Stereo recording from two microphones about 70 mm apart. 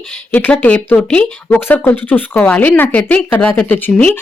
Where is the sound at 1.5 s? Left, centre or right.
Left.